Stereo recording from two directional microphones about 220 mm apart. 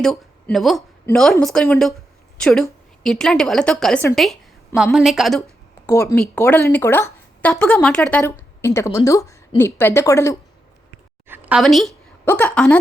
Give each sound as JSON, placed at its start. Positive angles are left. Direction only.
{"t": 0.0, "sound": "a woman's voice", "side_deg": 5}
{"t": 5.8, "sound": "a woman's voice", "side_deg": 15}
{"t": 11.3, "sound": "a sound", "side_deg": -5}
{"t": 12.3, "sound": "a woman's voice", "side_deg": 5}